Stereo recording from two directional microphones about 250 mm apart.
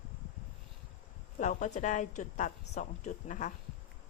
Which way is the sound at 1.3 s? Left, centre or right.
Left.